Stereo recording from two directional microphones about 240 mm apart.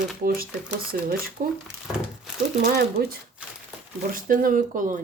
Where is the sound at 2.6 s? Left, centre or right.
Right.